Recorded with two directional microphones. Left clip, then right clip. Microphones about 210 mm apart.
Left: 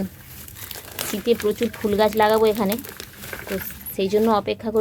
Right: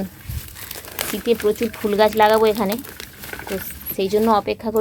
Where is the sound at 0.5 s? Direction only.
Centre (ahead or behind).